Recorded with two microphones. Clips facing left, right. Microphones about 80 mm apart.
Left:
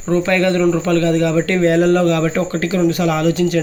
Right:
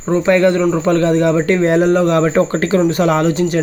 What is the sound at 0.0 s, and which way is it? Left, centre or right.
Speech, right.